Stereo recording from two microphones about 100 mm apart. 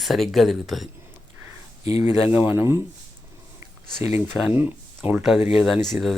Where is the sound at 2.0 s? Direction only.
20° right (ahead or behind).